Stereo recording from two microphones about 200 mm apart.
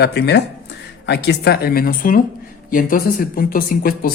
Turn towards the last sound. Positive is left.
turn(degrees=45)  # may be behind; listen again after turning